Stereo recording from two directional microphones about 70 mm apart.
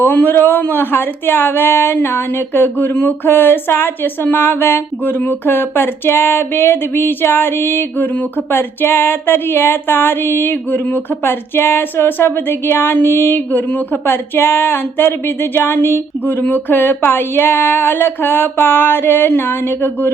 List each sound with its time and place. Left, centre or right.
0.0 s a man's voice: left